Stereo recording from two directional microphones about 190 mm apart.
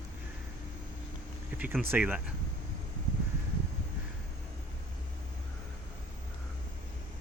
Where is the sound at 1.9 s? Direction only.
10° right (ahead or behind).